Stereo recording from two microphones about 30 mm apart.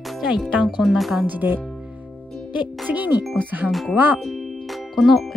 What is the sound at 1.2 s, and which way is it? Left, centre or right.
Speech, right.